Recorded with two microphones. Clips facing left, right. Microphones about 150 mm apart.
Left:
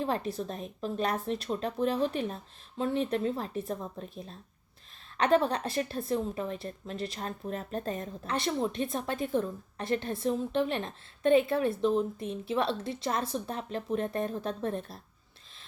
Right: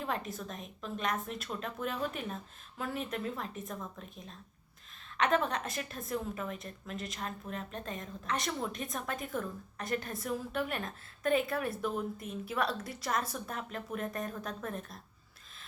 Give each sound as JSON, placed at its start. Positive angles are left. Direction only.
{"t": 0.0, "sound": "a woman's voice", "side_deg": 30}